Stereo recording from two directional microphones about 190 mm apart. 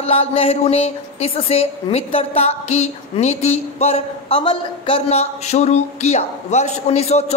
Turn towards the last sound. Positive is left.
turn(degrees=35)  # may be behind; listen again after turning